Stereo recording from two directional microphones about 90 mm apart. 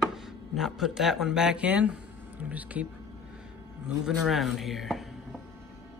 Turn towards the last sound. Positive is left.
turn(degrees=0)  # may be behind; listen again after turning